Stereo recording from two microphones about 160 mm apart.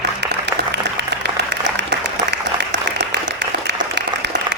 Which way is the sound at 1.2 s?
90° right.